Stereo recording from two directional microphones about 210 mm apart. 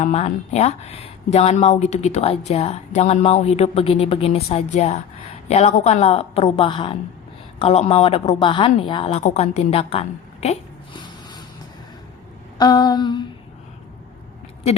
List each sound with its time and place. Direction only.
0.0 s a woman's voice: 30° left (ahead or behind)
12.5 s a woman's voice: 20° left (ahead or behind)